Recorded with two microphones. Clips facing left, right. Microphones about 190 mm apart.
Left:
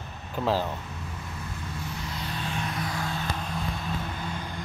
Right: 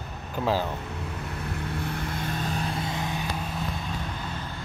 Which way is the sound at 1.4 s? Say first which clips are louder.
Right 6 dB; 65° right (ahead or behind).